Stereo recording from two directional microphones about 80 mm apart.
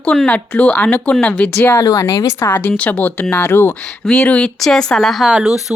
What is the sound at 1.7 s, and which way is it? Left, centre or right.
Speech, left.